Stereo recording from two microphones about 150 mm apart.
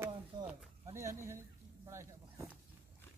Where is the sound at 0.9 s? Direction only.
20° right (ahead or behind).